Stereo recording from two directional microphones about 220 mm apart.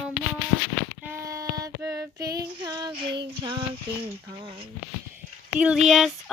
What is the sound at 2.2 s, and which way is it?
Child singing, 15° right (ahead or behind).